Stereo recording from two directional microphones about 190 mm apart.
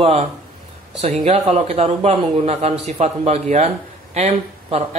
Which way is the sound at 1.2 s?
35° right (ahead or behind).